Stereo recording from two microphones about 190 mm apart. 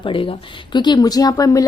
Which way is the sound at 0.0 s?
30° left (ahead or behind).